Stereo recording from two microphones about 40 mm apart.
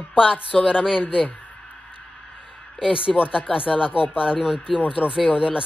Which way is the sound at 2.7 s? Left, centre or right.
Right.